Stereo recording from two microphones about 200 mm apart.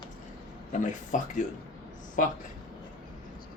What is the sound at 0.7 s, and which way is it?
Speech, 40° left (ahead or behind).